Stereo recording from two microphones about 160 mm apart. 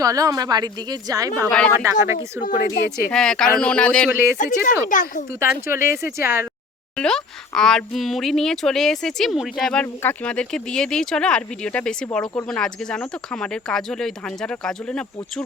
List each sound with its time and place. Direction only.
0.0 s speech: 20° right (ahead or behind)
1.5 s speech: 5° left (ahead or behind)
1.7 s speech: 15° right (ahead or behind)
2.4 s speech: 70° left (ahead or behind)
3.1 s speech: 5° left (ahead or behind)
4.1 s speech: 15° right (ahead or behind)
4.4 s speech: 55° left (ahead or behind)
5.4 s speech: 15° right (ahead or behind)
6.9 s speech: 5° left (ahead or behind)
9.8 s speech: 10° left (ahead or behind)
12.2 s speech: 20° left (ahead or behind)
12.5 s speech: 5° left (ahead or behind)